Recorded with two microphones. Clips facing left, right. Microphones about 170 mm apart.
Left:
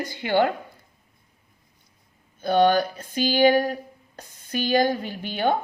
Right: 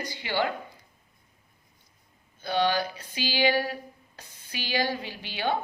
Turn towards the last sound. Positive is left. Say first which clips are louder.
# left 6 dB
turn(degrees=50)  # may be behind; listen again after turning